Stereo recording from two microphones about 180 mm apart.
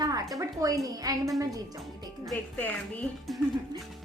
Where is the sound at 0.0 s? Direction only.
20° right (ahead or behind).